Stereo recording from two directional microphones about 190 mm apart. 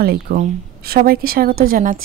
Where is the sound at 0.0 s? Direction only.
55° right (ahead or behind).